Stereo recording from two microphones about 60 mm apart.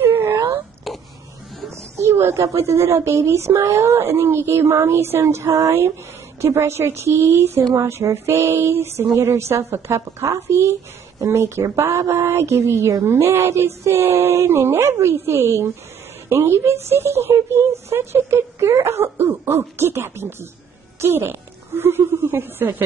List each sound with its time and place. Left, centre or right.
0.0 s wail: right
0.9 s a sound: centre
2.0 s a woman's voice: right
7.9 s speech: right
8.3 s a woman's voice: right
12.1 s a woman's voice: right